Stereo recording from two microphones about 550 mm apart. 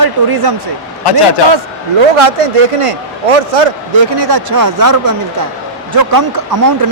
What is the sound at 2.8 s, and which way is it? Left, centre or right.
Speech, right.